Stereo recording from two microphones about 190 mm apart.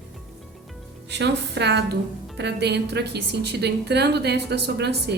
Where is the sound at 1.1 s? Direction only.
65° right (ahead or behind).